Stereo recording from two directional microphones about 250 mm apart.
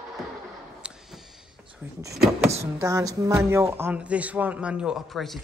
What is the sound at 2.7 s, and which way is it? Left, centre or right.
Speech, centre.